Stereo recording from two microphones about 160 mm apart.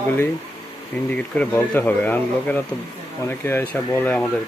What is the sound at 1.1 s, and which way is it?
Speech, 10° left (ahead or behind).